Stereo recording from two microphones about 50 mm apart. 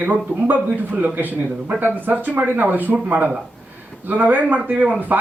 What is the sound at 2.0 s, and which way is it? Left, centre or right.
Speech, right.